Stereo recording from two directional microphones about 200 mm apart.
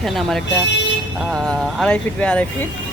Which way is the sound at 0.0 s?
Centre (ahead or behind).